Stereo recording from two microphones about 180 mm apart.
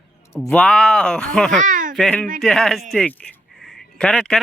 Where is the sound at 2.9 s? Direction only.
5° left (ahead or behind).